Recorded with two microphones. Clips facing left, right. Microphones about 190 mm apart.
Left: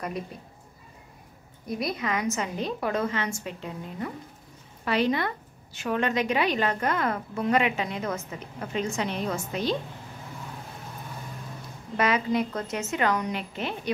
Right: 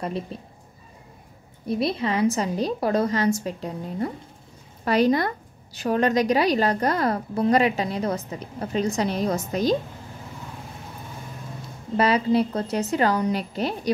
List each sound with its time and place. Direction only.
0.3 s a woman's voice: 30° right (ahead or behind)
1.7 s a woman's voice: 30° right (ahead or behind)
12.0 s a woman's voice: 30° right (ahead or behind)